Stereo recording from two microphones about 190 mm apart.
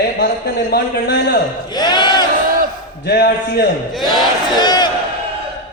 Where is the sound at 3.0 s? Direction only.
55° left (ahead or behind).